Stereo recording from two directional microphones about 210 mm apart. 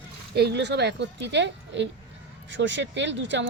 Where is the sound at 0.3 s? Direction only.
55° right (ahead or behind).